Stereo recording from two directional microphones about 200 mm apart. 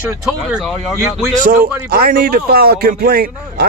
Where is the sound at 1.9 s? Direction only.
45° right (ahead or behind).